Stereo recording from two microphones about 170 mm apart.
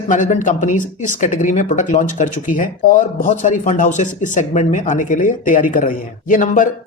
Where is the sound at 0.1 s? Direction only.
50° left (ahead or behind).